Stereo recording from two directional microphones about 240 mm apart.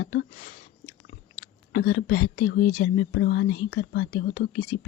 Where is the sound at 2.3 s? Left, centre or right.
Left.